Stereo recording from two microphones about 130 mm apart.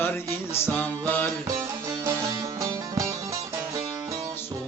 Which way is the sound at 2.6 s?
25° right (ahead or behind).